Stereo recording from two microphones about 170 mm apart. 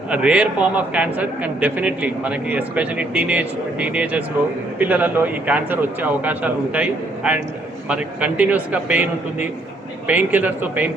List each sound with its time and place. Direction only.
0.1 s a man's voice: 5° right (ahead or behind)